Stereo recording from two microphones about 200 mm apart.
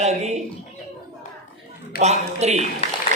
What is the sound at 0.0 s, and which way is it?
Speech, 35° right (ahead or behind).